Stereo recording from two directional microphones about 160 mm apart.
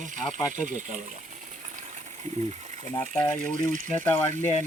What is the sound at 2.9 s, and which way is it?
Speech, 10° left (ahead or behind).